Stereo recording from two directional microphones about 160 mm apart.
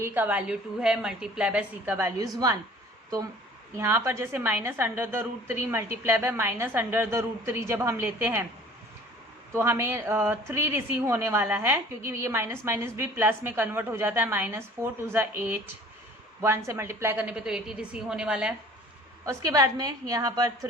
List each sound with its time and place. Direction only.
0.0 s a woman's voice: 10° right (ahead or behind)
3.8 s a woman's voice: 15° right (ahead or behind)
9.5 s a woman's voice: 15° right (ahead or behind)
19.2 s a woman's voice: 20° right (ahead or behind)